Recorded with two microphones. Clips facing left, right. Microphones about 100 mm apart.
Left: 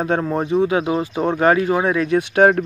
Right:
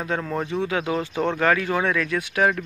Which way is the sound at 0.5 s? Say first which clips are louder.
Left 8 dB; 15° left (ahead or behind).